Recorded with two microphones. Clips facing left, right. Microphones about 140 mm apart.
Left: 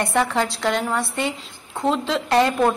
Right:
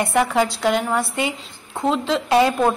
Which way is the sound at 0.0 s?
5° right (ahead or behind).